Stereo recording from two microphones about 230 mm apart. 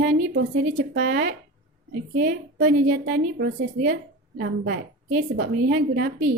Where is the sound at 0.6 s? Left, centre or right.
Right.